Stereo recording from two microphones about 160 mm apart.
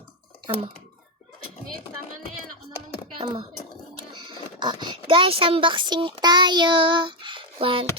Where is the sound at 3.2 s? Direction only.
30° right (ahead or behind).